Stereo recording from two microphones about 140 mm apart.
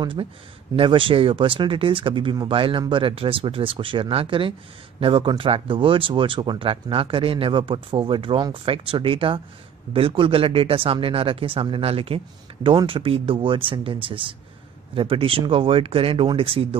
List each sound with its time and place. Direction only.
0.0 s speech: 35° right (ahead or behind)